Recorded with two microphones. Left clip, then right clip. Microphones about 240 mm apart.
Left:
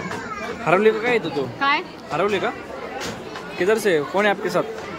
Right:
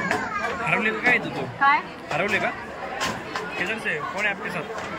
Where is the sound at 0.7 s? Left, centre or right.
Centre.